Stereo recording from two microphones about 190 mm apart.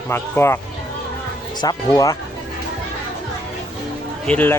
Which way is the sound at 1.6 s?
20° left (ahead or behind).